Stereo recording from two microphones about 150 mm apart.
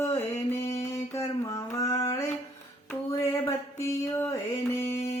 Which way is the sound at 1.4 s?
20° left (ahead or behind).